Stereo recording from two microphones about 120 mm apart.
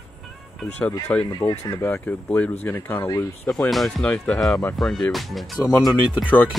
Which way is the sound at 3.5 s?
Centre (ahead or behind).